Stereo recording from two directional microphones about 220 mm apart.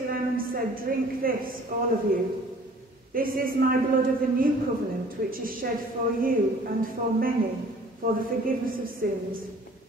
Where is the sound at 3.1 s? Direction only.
40° right (ahead or behind).